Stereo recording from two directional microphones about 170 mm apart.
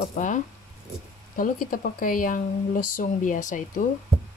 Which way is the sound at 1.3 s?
55° left (ahead or behind).